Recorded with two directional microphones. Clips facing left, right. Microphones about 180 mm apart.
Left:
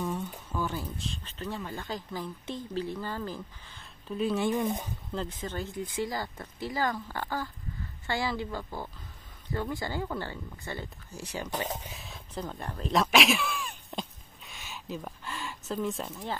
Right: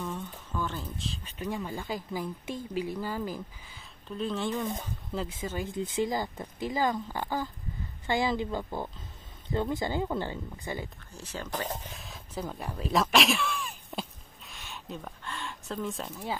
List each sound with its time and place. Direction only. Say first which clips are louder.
0.0 s a sound: left 3 dB; 10° left (ahead or behind)
1.2 s speech: right 5 dB; 15° right (ahead or behind)
4.1 s speech: left 3 dB; 5° left (ahead or behind)
5.1 s speech: right 1 dB; 5° right (ahead or behind)
5.8 s speech: right 5 dB; 20° right (ahead or behind)
11.1 s speech: left 1 dB; 15° left (ahead or behind)
12.0 s speech: right 1 dB; 5° right (ahead or behind)
14.4 s a sound: left 1 dB; centre (ahead or behind)